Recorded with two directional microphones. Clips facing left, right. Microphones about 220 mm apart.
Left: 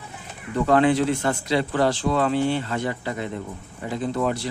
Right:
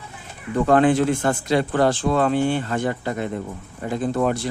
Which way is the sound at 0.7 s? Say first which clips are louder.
Right 2 dB; 50° right (ahead or behind).